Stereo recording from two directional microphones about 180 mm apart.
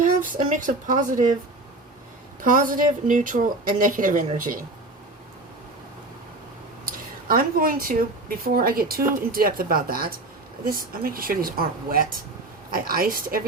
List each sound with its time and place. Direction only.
0.0 s speech: 45° right (ahead or behind)
2.4 s speech: 50° right (ahead or behind)
6.8 s speech: 50° right (ahead or behind)